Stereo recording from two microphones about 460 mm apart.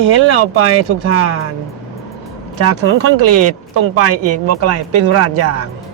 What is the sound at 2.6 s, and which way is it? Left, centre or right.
Speech, right.